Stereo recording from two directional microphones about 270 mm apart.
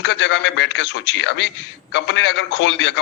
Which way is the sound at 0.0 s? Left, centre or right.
Left.